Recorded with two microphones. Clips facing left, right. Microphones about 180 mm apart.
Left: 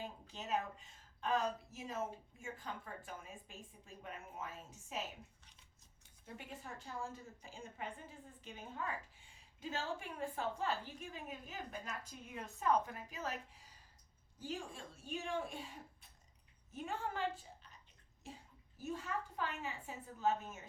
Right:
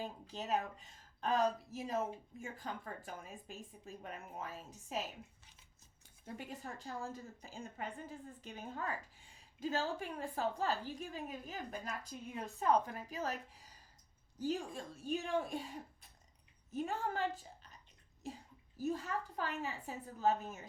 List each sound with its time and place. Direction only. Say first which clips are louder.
0.0 s a woman's voice: right 4 dB; 35° right (ahead or behind)
6.2 s a woman's voice: right 4 dB; 40° right (ahead or behind)